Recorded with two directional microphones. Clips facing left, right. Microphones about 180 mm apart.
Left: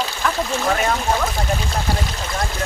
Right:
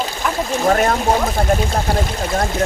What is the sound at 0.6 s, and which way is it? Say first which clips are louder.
Speech: right 6 dB; 45° right (ahead or behind).